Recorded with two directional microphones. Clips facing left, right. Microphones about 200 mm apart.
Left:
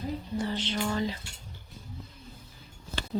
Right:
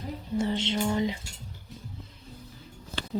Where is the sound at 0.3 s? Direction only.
25° right (ahead or behind).